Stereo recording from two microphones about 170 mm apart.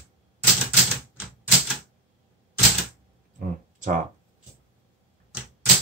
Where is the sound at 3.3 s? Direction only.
50° right (ahead or behind).